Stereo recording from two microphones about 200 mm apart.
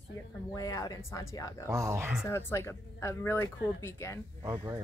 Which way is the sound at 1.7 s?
15° right (ahead or behind).